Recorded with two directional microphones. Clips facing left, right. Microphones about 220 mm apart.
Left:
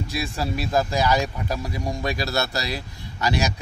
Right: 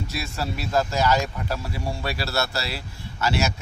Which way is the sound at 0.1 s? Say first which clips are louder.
Left 3 dB; 15° left (ahead or behind).